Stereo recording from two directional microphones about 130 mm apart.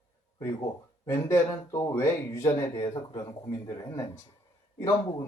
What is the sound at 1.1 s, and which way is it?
Speech, 20° left (ahead or behind).